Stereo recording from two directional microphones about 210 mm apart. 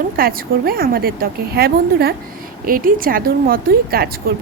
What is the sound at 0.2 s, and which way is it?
A woman's voice, 45° right (ahead or behind).